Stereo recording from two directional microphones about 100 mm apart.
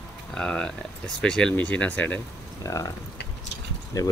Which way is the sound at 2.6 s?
35° left (ahead or behind).